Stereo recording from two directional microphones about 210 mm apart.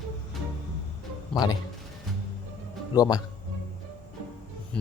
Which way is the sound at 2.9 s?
20° left (ahead or behind).